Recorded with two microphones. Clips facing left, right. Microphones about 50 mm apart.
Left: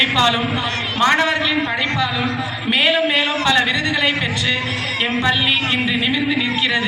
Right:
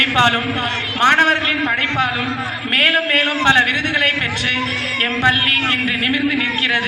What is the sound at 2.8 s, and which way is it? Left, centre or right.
Speech, right.